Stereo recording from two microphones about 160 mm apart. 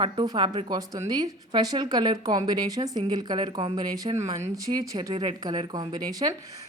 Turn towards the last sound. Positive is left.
turn(degrees=-25)  # may be behind; listen again after turning